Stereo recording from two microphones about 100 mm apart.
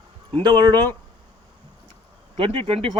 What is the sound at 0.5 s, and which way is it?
Speech, 45° right (ahead or behind).